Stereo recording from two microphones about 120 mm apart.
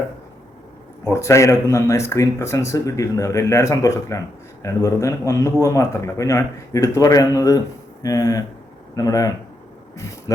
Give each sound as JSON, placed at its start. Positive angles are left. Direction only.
{"t": 1.0, "sound": "speech", "side_deg": 25}